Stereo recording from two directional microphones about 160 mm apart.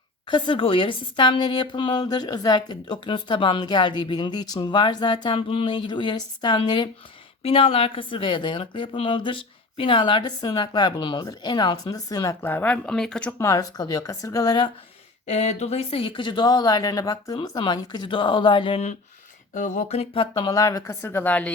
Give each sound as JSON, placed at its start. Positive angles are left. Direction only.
{"t": 0.3, "sound": "a woman's voice", "side_deg": 30}
{"t": 13.4, "sound": "a woman's voice", "side_deg": 20}
{"t": 15.3, "sound": "a woman's voice", "side_deg": 45}
{"t": 19.5, "sound": "speech", "side_deg": 50}
{"t": 20.3, "sound": "speech", "side_deg": 25}